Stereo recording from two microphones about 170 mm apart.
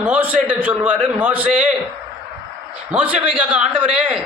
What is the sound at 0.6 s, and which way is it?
A man's voice, 10° right (ahead or behind).